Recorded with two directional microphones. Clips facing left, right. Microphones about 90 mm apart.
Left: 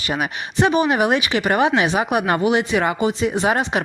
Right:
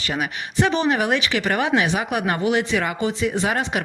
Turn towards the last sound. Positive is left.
turn(degrees=20)  # may be behind; listen again after turning